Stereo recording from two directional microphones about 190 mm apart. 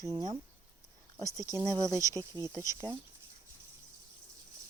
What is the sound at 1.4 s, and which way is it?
Speech, 20° right (ahead or behind).